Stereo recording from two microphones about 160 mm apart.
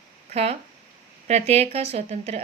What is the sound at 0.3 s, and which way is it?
A woman's voice, 40° right (ahead or behind).